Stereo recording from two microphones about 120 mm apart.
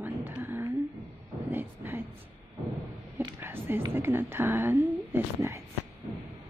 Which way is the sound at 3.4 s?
15° right (ahead or behind).